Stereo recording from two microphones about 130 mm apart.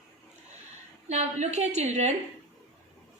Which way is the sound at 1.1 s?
60° right (ahead or behind).